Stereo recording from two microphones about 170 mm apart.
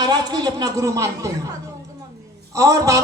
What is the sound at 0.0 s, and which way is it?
Speech, 25° right (ahead or behind).